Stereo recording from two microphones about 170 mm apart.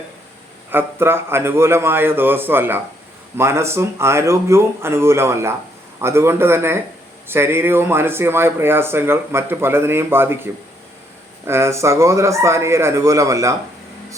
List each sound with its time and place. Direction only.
0.7 s speech: 15° right (ahead or behind)